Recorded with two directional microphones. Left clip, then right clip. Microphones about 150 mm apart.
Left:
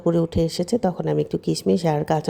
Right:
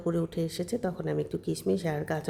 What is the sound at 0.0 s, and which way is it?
Speech, 35° left (ahead or behind).